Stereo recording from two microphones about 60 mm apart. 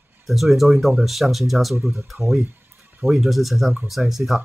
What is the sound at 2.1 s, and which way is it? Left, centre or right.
Speech, right.